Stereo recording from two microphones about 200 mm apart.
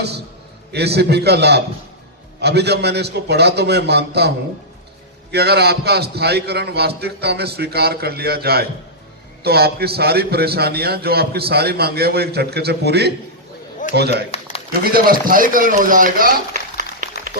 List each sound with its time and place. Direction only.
0.7 s a man's voice: 55° right (ahead or behind)
5.3 s a man's voice: 55° right (ahead or behind)
14.3 s a sound: 30° left (ahead or behind)
14.8 s a man's voice: 50° right (ahead or behind)